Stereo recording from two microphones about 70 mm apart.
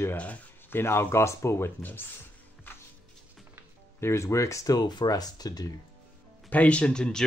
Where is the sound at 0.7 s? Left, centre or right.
Left.